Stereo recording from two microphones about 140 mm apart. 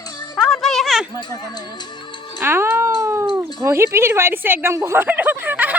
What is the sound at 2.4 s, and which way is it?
Cat, 15° right (ahead or behind).